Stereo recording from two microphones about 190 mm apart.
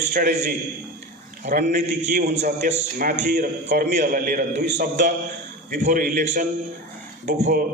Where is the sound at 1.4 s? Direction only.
40° right (ahead or behind).